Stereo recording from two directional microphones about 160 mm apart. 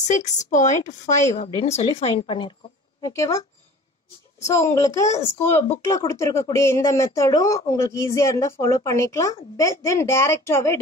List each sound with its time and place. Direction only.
0.1 s a woman's voice: 50° left (ahead or behind); by 2.5 s 30° left (ahead or behind)
3.0 s speech: 20° left (ahead or behind)
4.6 s speech: 20° left (ahead or behind)